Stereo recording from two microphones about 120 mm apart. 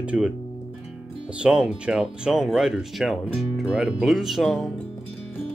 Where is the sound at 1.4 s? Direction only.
5° right (ahead or behind).